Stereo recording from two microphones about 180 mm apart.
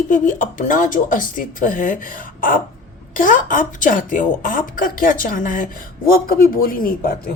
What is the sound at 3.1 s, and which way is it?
Speech, 50° left (ahead or behind).